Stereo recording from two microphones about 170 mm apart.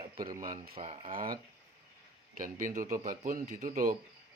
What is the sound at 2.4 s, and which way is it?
Speech, 50° right (ahead or behind).